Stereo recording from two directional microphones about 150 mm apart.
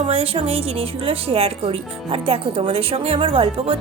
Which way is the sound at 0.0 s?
40° right (ahead or behind).